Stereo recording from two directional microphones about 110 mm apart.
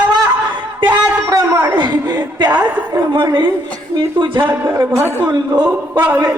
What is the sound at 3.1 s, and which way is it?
Speech, 40° right (ahead or behind).